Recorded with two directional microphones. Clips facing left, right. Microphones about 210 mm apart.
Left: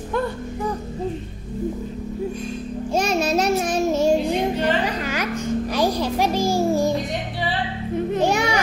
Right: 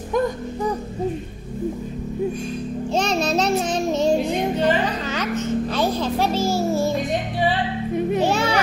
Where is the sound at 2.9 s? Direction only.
10° left (ahead or behind).